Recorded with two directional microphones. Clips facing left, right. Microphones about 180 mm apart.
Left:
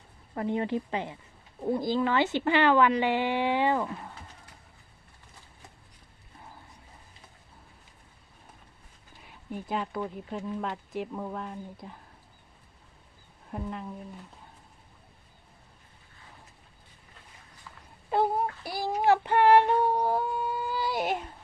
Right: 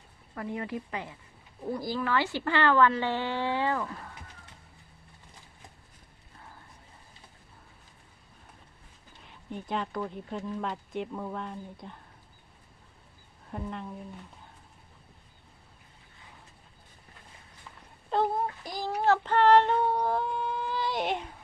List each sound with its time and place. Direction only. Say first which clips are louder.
0.3 s a woman's voice: left 6 dB; 25° left (ahead or behind)
9.2 s speech: left 1 dB; 5° left (ahead or behind)
13.5 s speech: left 1 dB; 5° left (ahead or behind)
18.1 s child singing: left 1 dB; 10° left (ahead or behind)